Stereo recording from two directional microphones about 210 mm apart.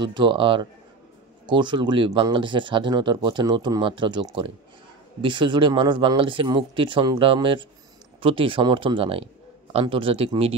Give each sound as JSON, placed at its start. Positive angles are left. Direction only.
{"t": 0.0, "sound": "speech", "side_deg": -20}